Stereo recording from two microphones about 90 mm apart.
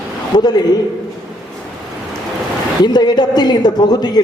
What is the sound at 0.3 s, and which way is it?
Speech, 50° left (ahead or behind).